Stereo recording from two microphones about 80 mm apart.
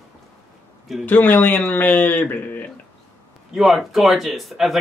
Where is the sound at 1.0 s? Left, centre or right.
Left.